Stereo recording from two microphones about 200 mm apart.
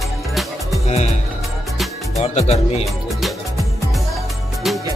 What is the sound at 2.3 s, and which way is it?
Speech, 35° left (ahead or behind).